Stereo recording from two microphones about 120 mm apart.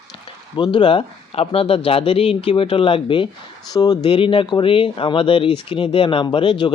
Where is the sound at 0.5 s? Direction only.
40° left (ahead or behind).